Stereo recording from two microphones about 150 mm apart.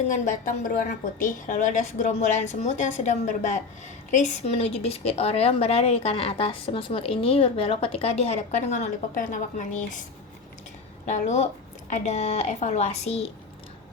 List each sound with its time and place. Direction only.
0.1 s a woman's voice: 60° left (ahead or behind)
11.0 s a woman's voice: 50° left (ahead or behind)